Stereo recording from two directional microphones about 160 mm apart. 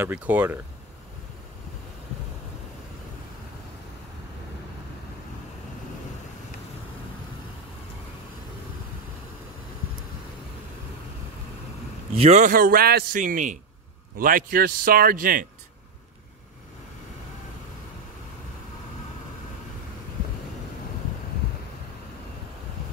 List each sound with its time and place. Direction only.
0.0 s speech: 10° right (ahead or behind)
12.2 s a man's voice: 45° right (ahead or behind); by 15.4 s 60° right (ahead or behind)